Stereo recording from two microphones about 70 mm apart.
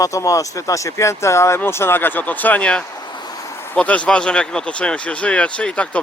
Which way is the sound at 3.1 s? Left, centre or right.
Left.